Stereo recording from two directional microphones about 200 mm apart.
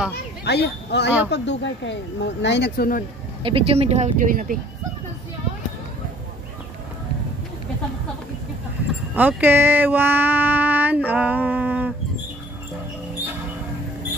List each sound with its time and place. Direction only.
0.5 s speech: 55° left (ahead or behind)
3.4 s speech: 30° right (ahead or behind)
9.1 s speech: 10° right (ahead or behind)